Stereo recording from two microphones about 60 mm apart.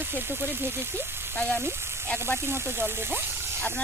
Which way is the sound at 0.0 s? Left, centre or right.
Right.